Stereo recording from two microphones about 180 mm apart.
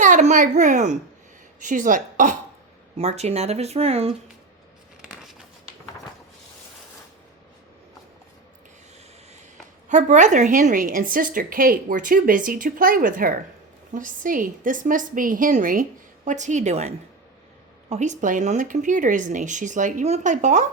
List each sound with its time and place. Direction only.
0.0 s a child's voice: 40° right (ahead or behind)
9.9 s a woman's voice: 40° right (ahead or behind)